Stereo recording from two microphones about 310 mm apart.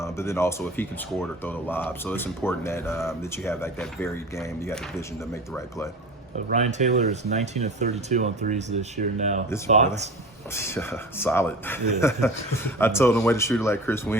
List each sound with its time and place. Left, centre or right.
0.0 s speech: centre
6.5 s speech: right
10.5 s speech: centre